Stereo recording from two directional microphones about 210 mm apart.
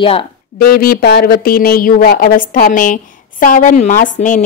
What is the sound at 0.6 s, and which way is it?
A woman's voice, 45° left (ahead or behind).